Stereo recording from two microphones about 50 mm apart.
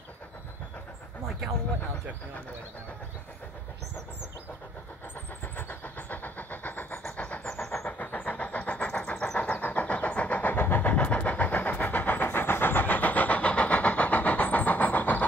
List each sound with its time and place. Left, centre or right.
5.4 s vehicle: left
7.0 s vehicle: left
10.5 s vehicle: left